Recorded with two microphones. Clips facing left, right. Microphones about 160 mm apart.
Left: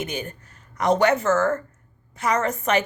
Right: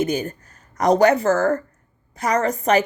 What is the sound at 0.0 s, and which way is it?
Speech, 40° right (ahead or behind).